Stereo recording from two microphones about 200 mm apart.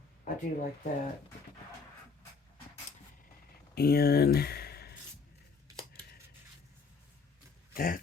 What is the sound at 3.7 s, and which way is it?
Speech, 50° left (ahead or behind).